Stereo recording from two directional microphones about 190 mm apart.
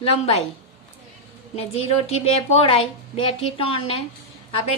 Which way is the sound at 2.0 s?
30° left (ahead or behind).